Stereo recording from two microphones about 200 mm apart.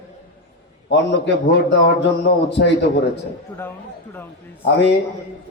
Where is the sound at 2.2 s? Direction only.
60° left (ahead or behind).